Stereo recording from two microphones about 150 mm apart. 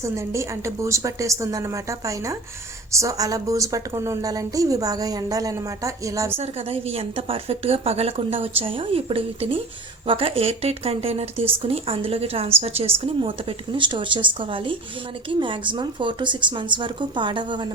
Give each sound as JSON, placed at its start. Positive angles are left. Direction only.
{"t": 0.0, "sound": "a woman's voice", "side_deg": -20}
{"t": 6.3, "sound": "speech", "side_deg": -40}